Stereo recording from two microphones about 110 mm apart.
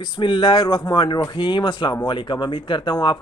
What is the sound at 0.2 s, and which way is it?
Speech, 45° left (ahead or behind).